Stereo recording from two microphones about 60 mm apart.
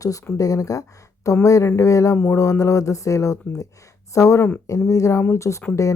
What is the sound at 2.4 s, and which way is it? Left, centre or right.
Speech, left.